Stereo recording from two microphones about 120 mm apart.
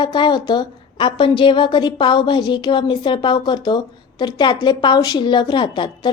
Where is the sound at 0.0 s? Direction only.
40° left (ahead or behind).